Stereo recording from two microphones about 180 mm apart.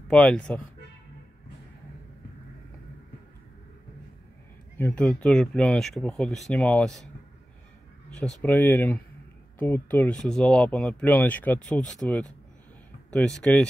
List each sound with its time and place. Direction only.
0.1 s speech: 5° left (ahead or behind)
4.7 s speech: 10° left (ahead or behind)
8.1 s speech: 5° left (ahead or behind)